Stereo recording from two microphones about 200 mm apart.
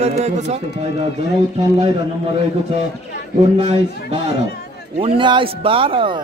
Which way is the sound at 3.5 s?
30° right (ahead or behind).